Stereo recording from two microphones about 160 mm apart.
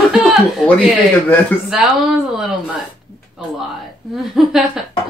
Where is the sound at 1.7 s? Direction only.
5° right (ahead or behind).